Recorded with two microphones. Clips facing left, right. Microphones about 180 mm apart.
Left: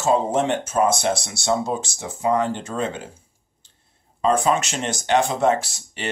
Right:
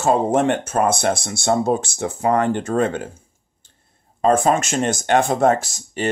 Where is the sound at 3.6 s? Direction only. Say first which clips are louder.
Right 5 dB; 50° right (ahead or behind).